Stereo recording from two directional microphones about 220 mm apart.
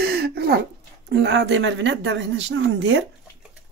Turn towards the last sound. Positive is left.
turn(degrees=-60)  # may be behind; listen again after turning